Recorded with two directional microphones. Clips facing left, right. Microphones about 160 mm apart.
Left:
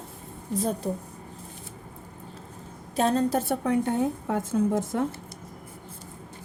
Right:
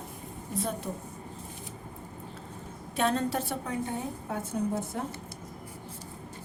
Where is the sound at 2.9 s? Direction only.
35° left (ahead or behind); by 5.0 s 90° left.